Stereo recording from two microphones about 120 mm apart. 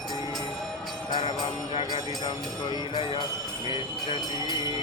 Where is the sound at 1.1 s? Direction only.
40° left (ahead or behind).